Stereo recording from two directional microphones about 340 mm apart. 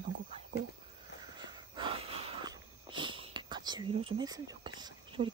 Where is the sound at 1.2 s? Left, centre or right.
Centre.